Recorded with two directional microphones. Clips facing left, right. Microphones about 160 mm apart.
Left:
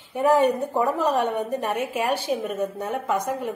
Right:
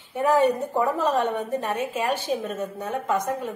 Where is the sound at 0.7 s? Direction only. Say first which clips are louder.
Left 1 dB; 15° left (ahead or behind).